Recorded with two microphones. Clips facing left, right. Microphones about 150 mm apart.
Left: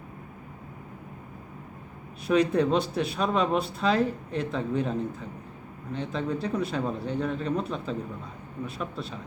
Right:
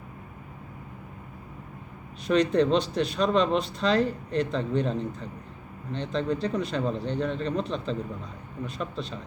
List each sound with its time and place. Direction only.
2.2 s speech: 5° left (ahead or behind)